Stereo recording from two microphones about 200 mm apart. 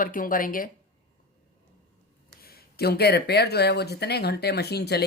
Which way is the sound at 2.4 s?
50° left (ahead or behind).